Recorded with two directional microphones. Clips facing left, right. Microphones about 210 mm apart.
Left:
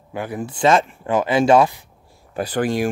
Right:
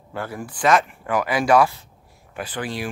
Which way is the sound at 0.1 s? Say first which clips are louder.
Left 4 dB; 15° left (ahead or behind).